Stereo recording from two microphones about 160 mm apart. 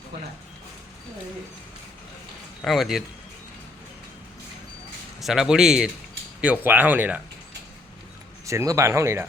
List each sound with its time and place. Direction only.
2.6 s speech: centre (ahead or behind)
5.2 s speech: centre (ahead or behind)
8.4 s speech: 20° right (ahead or behind)